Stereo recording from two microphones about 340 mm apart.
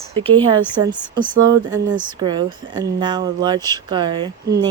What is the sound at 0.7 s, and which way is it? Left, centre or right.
Speech, centre.